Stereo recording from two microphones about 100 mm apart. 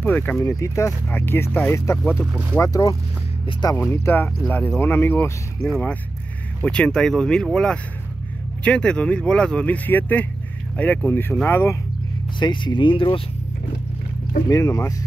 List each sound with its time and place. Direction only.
0.0 s speech: 15° left (ahead or behind)
0.4 s speech: 30° left (ahead or behind)
2.6 s speech: 35° left (ahead or behind)
3.7 s speech: 25° left (ahead or behind)
12.4 s speech: 50° left (ahead or behind)
14.5 s speech: 35° left (ahead or behind)